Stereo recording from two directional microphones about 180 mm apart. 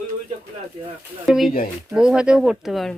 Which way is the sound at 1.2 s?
5° right (ahead or behind).